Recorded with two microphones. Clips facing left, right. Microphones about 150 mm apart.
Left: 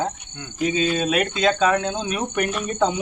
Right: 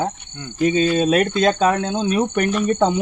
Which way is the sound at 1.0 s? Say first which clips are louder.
Right 5 dB; 40° right (ahead or behind).